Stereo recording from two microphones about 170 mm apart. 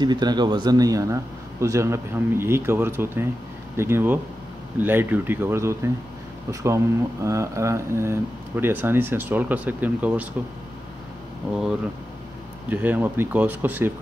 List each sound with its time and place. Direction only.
0.0 s speech: 25° right (ahead or behind); by 10.2 s 10° right (ahead or behind)
12.6 s speech: 10° right (ahead or behind)